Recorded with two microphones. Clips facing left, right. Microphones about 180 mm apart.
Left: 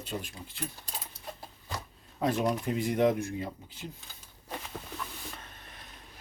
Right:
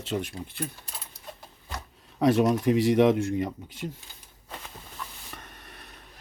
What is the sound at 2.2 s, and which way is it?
Speech, 80° right.